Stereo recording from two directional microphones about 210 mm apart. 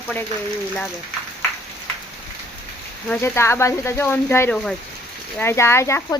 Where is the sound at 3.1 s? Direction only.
10° left (ahead or behind).